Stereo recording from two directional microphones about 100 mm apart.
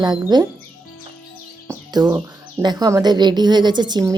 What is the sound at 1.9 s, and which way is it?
A woman's voice, 40° right (ahead or behind).